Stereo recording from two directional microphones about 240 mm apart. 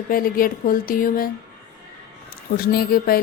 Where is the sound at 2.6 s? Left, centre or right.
Left.